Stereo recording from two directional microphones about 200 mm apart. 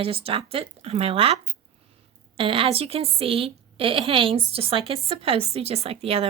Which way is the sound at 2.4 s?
25° right (ahead or behind).